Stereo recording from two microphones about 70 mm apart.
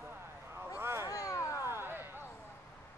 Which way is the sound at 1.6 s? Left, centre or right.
Right.